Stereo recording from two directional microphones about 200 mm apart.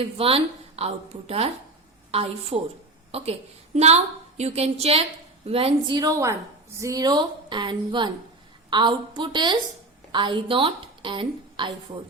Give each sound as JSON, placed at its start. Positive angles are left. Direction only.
{"t": 0.0, "sound": "a woman's voice", "side_deg": -30}